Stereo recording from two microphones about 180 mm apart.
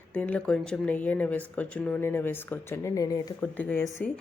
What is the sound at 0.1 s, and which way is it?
A woman's voice, 5° left (ahead or behind).